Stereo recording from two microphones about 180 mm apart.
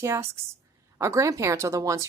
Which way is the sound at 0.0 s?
15° right (ahead or behind).